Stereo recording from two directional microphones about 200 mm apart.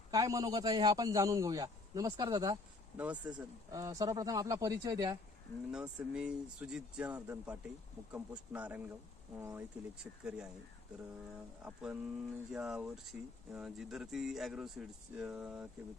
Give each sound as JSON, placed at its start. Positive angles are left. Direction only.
{"t": 0.1, "sound": "a man's voice", "side_deg": -15}
{"t": 3.0, "sound": "a man's voice", "side_deg": -5}
{"t": 3.8, "sound": "a man's voice", "side_deg": -15}
{"t": 5.7, "sound": "a man's voice", "side_deg": -5}
{"t": 11.6, "sound": "speech", "side_deg": -5}